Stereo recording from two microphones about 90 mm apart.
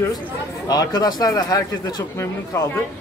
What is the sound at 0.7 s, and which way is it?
A man's voice, 45° left (ahead or behind).